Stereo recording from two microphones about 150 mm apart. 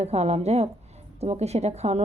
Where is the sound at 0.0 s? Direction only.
45° right (ahead or behind).